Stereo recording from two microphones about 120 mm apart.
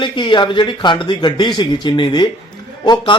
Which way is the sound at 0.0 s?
40° left (ahead or behind).